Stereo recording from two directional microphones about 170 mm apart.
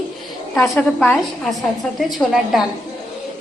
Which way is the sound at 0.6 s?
5° left (ahead or behind).